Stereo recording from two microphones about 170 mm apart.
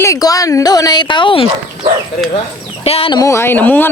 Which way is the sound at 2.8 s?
35° left (ahead or behind).